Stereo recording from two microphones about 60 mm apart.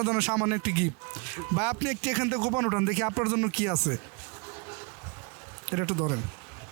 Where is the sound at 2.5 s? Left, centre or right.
Right; by 3.9 s centre.